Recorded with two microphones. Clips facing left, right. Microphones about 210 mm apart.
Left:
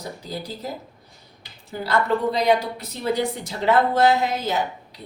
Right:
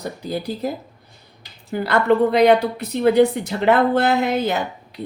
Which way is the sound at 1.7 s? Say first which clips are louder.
Right 5 dB; 60° right (ahead or behind).